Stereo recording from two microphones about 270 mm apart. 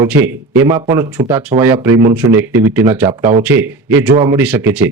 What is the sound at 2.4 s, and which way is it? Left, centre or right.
Speech, centre.